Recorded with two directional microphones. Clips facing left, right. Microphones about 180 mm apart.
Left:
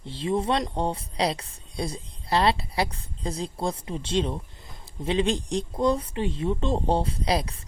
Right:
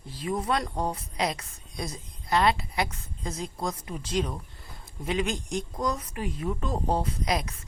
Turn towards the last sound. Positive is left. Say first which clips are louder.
# left 3 dB
turn(degrees=30)  # may be behind; listen again after turning